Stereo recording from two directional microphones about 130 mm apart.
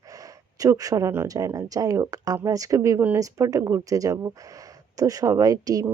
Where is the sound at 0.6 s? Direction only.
25° right (ahead or behind).